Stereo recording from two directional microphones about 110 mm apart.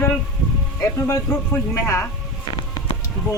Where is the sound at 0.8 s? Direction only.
25° left (ahead or behind).